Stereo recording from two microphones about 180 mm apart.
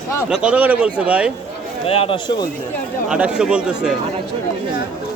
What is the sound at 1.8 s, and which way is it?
Speech, 30° left (ahead or behind).